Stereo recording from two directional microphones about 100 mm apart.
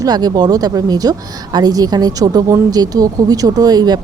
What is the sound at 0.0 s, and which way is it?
A woman's voice, 40° right (ahead or behind).